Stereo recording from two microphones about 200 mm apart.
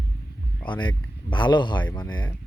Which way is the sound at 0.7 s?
25° left (ahead or behind).